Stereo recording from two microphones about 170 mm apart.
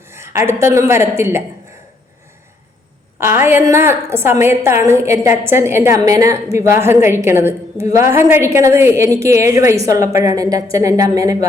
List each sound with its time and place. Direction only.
0.1 s speech: 15° right (ahead or behind)
3.2 s a woman's voice: 15° right (ahead or behind)